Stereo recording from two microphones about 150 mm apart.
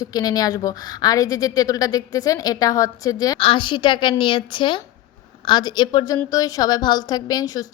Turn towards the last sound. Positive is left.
turn(degrees=25)  # may be behind; listen again after turning